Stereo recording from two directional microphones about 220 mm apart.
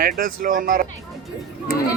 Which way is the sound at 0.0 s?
40° right (ahead or behind).